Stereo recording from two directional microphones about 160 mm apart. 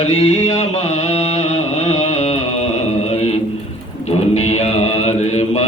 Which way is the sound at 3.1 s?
40° left (ahead or behind).